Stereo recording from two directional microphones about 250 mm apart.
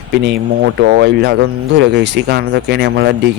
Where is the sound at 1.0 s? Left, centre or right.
Right.